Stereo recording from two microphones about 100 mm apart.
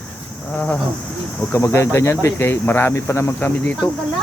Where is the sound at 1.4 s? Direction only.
25° left (ahead or behind).